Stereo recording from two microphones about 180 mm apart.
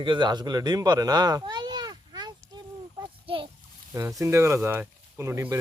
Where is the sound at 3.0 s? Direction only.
30° right (ahead or behind).